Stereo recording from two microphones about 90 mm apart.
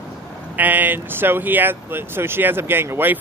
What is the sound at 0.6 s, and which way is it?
Speech, 20° right (ahead or behind).